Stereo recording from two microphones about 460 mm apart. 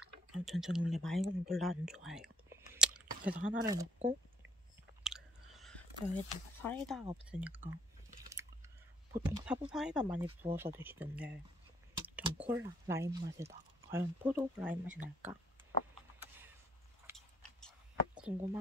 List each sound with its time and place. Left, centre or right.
0.0 s speech: centre
2.0 s whispering: centre
3.3 s speech: centre
5.0 s chewing: centre
6.3 s speech: centre
8.3 s chewing: centre
10.2 s speech: centre
14.9 s speech: centre
17.0 s a sound: centre